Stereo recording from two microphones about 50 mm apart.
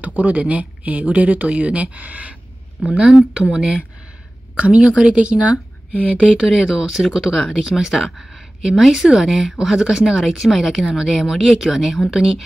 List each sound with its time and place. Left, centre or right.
0.0 s speech: right
3.0 s speech: centre
6.2 s speech: centre
7.3 s speech: centre
7.6 s speech: centre